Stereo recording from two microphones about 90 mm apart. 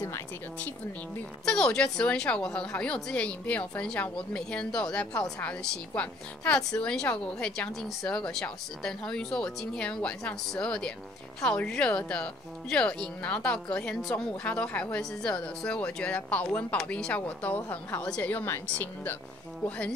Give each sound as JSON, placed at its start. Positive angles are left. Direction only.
{"t": 1.4, "sound": "a woman's voice", "side_deg": 10}